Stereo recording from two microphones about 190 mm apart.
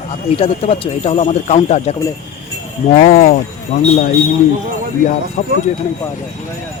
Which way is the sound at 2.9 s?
45° left (ahead or behind).